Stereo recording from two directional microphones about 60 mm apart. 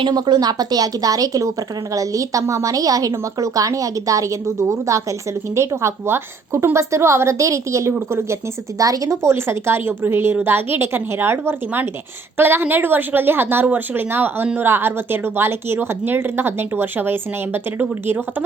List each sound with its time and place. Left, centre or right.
0.1 s a woman's voice: right
3.1 s a woman's voice: right
5.5 s a woman's voice: right
7.9 s a woman's voice: right
8.8 s a woman's voice: right